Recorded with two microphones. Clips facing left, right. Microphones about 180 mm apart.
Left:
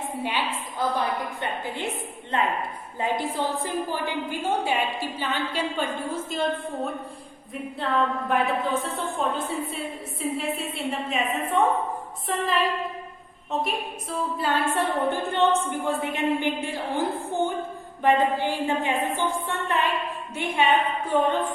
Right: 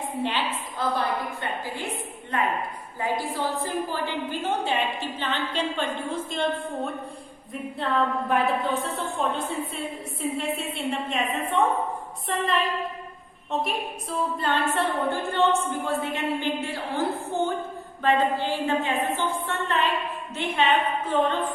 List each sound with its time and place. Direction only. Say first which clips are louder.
0.2 s a woman's voice: right 2 dB; 10° left (ahead or behind)
13.5 s a woman's voice: even; centre (ahead or behind)